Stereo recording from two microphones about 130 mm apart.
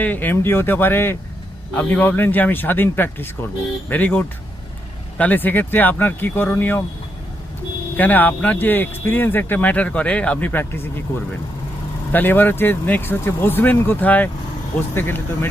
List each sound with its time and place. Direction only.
0.0 s speech: 15° left (ahead or behind)
7.9 s speech: 15° left (ahead or behind)
12.1 s speech: 15° left (ahead or behind)